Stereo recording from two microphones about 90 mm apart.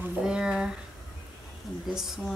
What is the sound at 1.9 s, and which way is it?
Speech, 5° right (ahead or behind).